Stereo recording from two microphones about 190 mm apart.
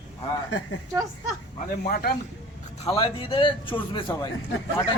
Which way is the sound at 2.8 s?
30° left (ahead or behind).